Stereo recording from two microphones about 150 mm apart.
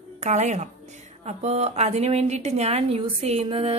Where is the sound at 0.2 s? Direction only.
50° right (ahead or behind).